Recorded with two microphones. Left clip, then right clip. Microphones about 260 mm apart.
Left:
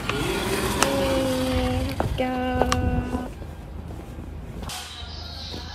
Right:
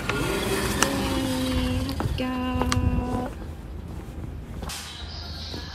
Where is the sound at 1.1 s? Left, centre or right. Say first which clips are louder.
Left 4 dB; left.